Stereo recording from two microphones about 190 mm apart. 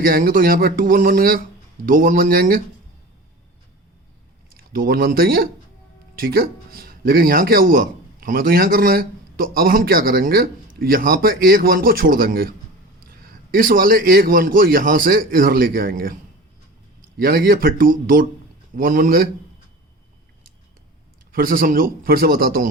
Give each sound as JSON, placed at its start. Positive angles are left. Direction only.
{"t": 0.0, "sound": "speech", "side_deg": -50}
{"t": 4.5, "sound": "speech", "side_deg": -50}
{"t": 17.2, "sound": "speech", "side_deg": -50}
{"t": 21.3, "sound": "speech", "side_deg": -50}